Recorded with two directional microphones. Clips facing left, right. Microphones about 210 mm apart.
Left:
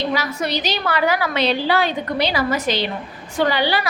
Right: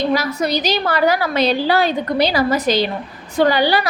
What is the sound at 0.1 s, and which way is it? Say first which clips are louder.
A woman's voice: right 4 dB; 40° right (ahead or behind).